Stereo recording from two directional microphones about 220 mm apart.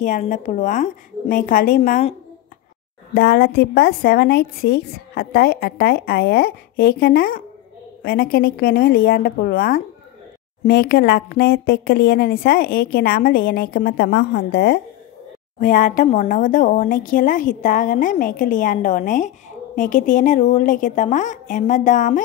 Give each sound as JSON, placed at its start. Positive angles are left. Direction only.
{"t": 0.0, "sound": "speech", "side_deg": 35}
{"t": 3.2, "sound": "a woman's voice", "side_deg": 45}
{"t": 15.6, "sound": "speech", "side_deg": 35}